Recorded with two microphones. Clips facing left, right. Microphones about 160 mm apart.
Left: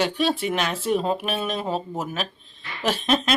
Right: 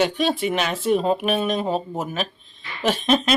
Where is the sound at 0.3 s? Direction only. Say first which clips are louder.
Right 2 dB; centre (ahead or behind).